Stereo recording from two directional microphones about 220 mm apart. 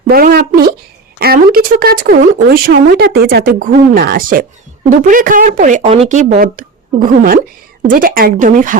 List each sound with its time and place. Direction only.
0.1 s a woman's voice: 40° right (ahead or behind)